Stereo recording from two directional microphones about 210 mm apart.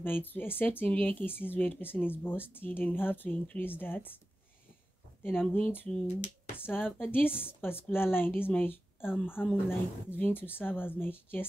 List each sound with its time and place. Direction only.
0.0 s speech: 10° left (ahead or behind)
5.5 s speech: 10° left (ahead or behind)